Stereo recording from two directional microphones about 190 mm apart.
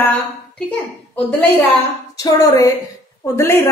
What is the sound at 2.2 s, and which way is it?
A woman's voice, 15° left (ahead or behind).